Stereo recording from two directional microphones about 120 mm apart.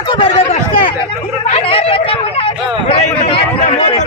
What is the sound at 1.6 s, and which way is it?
Hubbub, 50° left (ahead or behind).